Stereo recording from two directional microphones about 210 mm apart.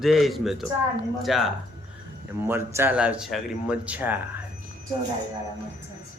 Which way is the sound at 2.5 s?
10° right (ahead or behind).